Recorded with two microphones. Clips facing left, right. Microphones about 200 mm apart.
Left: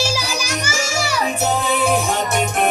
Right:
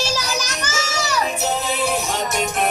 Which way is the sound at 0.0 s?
10° left (ahead or behind).